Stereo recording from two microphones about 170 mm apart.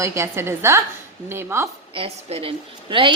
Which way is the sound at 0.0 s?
15° right (ahead or behind).